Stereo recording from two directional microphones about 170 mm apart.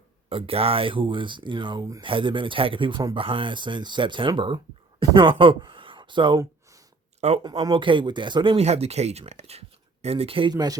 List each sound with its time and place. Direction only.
0.3 s speech: 35° right (ahead or behind)
6.4 s a sound: 20° right (ahead or behind)
7.2 s speech: 40° right (ahead or behind)
7.6 s speech: 30° right (ahead or behind)
8.5 s speech: 40° right (ahead or behind); by 10.8 s 25° right (ahead or behind)